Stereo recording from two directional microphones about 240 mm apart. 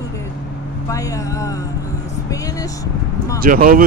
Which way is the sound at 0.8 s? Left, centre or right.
Centre.